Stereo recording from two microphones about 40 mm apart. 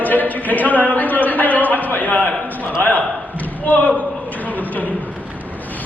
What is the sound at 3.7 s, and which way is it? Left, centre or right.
Speech, left.